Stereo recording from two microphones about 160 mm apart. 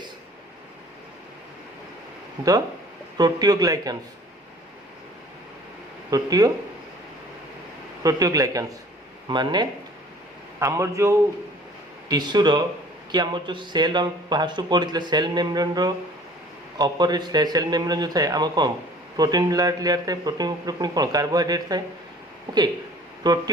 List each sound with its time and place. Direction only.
3.2 s a man's voice: 25° right (ahead or behind)
6.1 s a man's voice: 25° right (ahead or behind)
8.0 s a man's voice: 20° right (ahead or behind)
23.2 s a man's voice: 25° right (ahead or behind)